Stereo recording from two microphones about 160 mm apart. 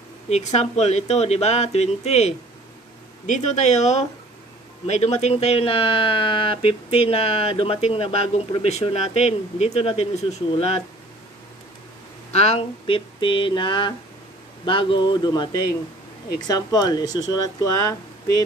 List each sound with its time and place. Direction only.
0.3 s speech: 45° left (ahead or behind)
12.3 s speech: 40° left (ahead or behind); by 18.4 s 20° left (ahead or behind)